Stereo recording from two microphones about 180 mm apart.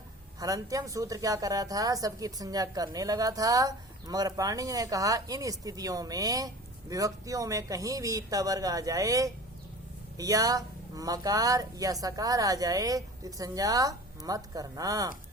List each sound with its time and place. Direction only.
0.3 s a woman's voice: 20° right (ahead or behind)